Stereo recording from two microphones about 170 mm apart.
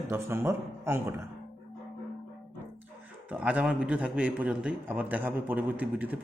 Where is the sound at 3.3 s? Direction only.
10° right (ahead or behind).